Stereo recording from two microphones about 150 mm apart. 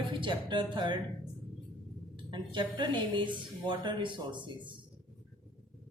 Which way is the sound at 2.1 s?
30° right (ahead or behind).